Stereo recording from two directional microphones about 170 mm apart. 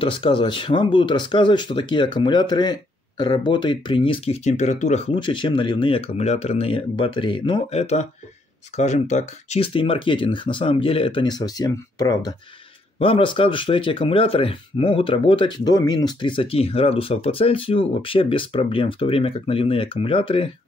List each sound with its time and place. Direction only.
0.0 s speech: 30° left (ahead or behind)